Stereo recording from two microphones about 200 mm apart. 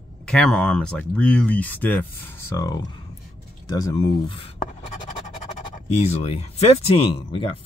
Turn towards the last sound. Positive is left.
turn(degrees=30)  # may be behind; listen again after turning